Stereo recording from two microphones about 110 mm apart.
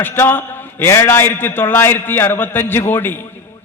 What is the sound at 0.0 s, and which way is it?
A man's voice, 20° left (ahead or behind).